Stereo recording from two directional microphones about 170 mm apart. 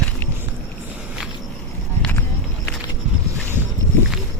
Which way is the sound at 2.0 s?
10° left (ahead or behind).